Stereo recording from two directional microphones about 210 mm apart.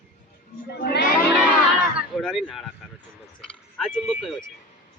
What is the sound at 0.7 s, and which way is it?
Speech, 50° left (ahead or behind).